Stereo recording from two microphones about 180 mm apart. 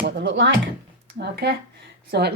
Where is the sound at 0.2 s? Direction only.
90° right.